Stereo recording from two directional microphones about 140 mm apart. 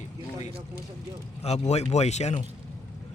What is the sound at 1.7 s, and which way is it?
Speech, 50° left (ahead or behind).